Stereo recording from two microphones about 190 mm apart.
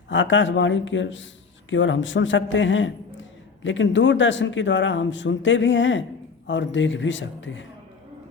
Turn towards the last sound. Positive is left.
turn(degrees=75)  # may be behind; listen again after turning